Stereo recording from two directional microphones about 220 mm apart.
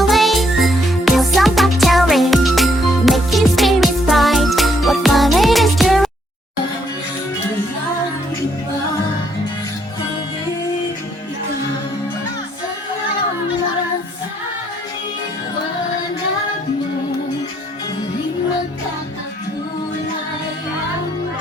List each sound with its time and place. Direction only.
0.0 s music: centre (ahead or behind)